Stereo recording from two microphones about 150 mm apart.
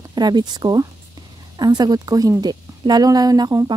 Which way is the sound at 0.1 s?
30° right (ahead or behind).